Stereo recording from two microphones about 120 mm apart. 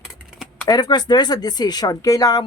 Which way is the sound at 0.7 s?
35° left (ahead or behind).